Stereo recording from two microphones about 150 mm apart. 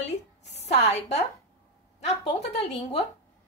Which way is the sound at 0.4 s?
45° left (ahead or behind).